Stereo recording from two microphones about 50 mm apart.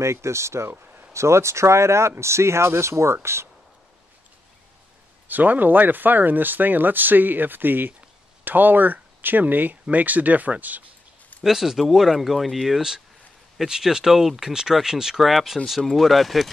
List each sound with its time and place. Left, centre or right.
0.0 s speech: right
5.3 s speech: right
11.4 s speech: centre